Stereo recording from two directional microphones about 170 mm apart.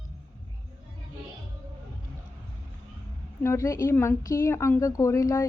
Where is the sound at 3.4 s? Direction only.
15° left (ahead or behind).